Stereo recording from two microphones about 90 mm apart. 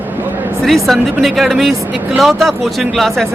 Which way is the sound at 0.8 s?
Centre (ahead or behind).